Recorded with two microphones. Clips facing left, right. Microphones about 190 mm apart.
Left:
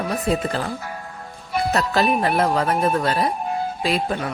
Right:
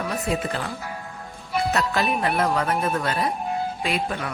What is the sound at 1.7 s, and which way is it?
Speech, 35° left (ahead or behind).